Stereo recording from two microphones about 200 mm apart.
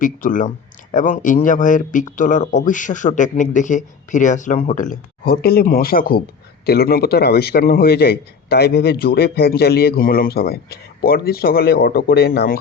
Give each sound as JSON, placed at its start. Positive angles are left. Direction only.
{"t": 0.0, "sound": "a man's voice", "side_deg": 40}